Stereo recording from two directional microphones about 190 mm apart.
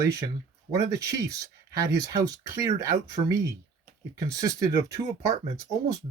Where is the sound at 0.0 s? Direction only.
15° right (ahead or behind).